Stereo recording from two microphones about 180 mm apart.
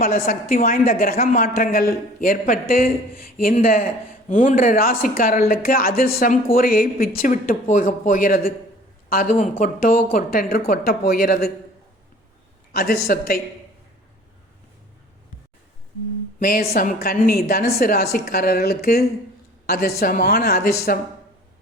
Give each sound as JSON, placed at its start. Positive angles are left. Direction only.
{"t": 0.3, "sound": "speech", "side_deg": 50}
{"t": 12.7, "sound": "a woman's voice", "side_deg": 60}
{"t": 16.4, "sound": "a woman's voice", "side_deg": 55}